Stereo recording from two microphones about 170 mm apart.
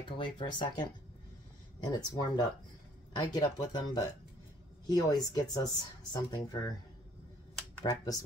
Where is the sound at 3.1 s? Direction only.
25° left (ahead or behind).